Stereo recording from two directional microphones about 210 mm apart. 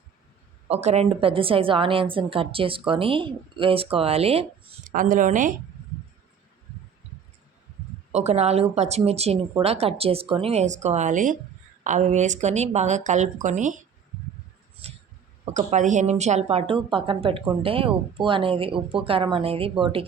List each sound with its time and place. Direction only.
0.7 s a woman's voice: 30° right (ahead or behind)
8.1 s speech: 30° right (ahead or behind)
15.5 s a woman's voice: 35° right (ahead or behind)